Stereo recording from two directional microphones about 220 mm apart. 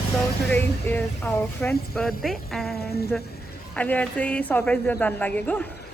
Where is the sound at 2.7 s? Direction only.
45° left (ahead or behind).